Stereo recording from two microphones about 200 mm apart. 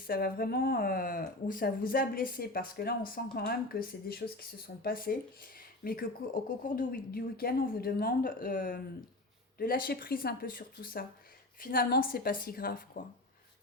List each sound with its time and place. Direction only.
0.0 s speech: 50° left (ahead or behind)